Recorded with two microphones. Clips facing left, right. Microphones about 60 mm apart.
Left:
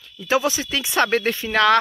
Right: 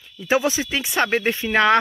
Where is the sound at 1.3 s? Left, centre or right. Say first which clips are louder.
Right 1 dB; right.